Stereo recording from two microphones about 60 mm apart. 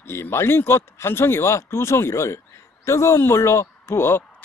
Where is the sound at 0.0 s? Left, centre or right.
Left.